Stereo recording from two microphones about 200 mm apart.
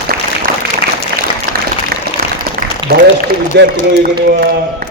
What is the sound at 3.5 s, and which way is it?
A man's voice, 55° right (ahead or behind).